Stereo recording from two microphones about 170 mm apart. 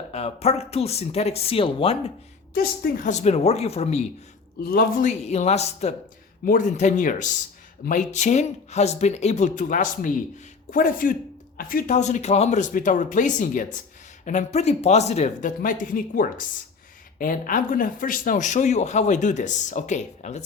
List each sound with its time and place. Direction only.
0.1 s speech: 40° left (ahead or behind)
2.6 s speech: 55° left (ahead or behind); by 4.0 s 40° left (ahead or behind)
4.6 s a man's voice: 60° left (ahead or behind)
5.2 s speech: 40° left (ahead or behind)
6.4 s a man's voice: 50° left (ahead or behind)